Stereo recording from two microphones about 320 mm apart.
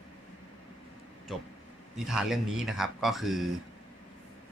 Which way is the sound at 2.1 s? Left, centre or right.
Centre.